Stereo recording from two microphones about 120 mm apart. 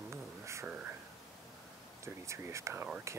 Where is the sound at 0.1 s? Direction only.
25° right (ahead or behind).